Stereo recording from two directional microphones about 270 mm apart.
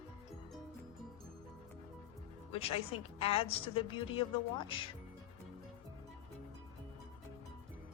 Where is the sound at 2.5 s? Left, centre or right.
Left.